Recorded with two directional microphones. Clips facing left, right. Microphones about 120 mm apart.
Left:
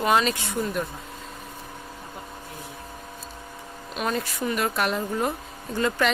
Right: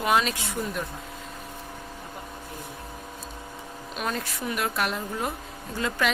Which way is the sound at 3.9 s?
Centre (ahead or behind).